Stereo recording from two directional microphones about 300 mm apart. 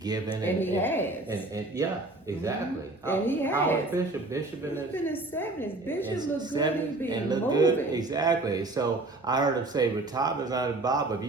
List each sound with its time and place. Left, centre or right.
0.4 s a woman's voice: centre
3.1 s a woman's voice: centre
6.1 s speech: centre